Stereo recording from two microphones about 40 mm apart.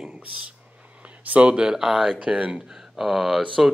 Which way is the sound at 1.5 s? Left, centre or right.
Centre.